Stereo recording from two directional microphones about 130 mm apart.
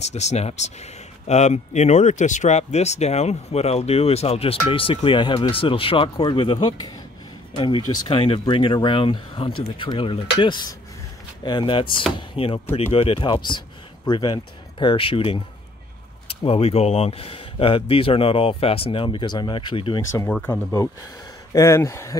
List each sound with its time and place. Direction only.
0.0 s speech: 60° left (ahead or behind)
16.4 s speech: 50° left (ahead or behind)
20.2 s speech: 10° left (ahead or behind)
21.5 s speech: 20° left (ahead or behind)